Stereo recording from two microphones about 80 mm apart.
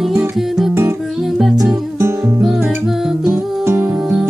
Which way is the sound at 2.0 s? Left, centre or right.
Right.